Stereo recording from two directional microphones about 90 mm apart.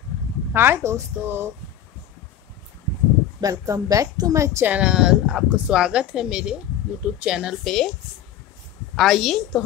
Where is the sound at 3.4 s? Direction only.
40° right (ahead or behind).